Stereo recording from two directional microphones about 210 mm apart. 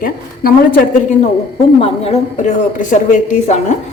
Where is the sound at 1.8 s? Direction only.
30° left (ahead or behind).